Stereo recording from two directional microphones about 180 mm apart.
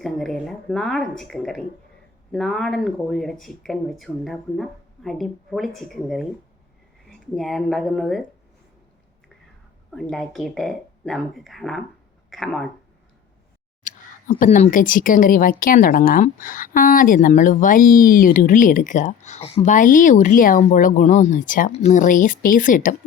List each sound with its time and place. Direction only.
0.0 s speech: centre (ahead or behind)
9.9 s speech: centre (ahead or behind)
13.8 s speech: 45° left (ahead or behind)